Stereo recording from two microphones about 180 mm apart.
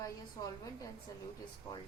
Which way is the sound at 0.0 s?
20° left (ahead or behind).